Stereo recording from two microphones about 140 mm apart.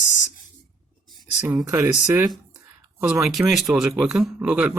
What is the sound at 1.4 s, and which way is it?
Speech, 15° right (ahead or behind).